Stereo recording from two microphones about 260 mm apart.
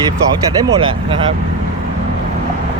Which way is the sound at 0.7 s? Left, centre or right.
Centre.